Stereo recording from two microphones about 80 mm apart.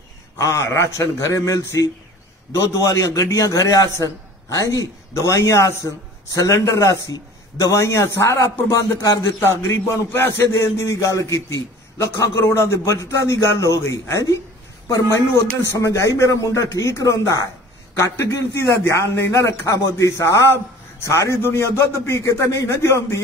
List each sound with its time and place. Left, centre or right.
0.4 s a man's voice: left